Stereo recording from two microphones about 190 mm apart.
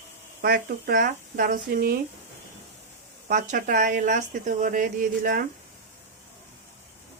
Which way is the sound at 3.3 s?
45° right (ahead or behind).